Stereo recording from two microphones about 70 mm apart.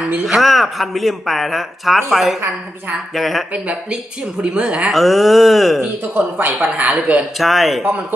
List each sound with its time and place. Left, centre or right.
0.3 s speech: centre
3.6 s speech: centre
4.9 s speech: centre
6.1 s speech: right
7.3 s speech: centre